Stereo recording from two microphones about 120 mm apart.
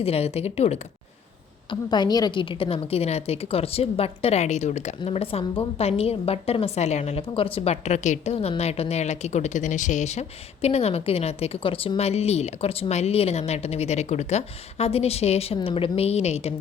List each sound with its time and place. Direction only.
0.0 s a woman's voice: 55° left (ahead or behind)
1.7 s a woman's voice: 35° left (ahead or behind); by 16.6 s 60° left (ahead or behind)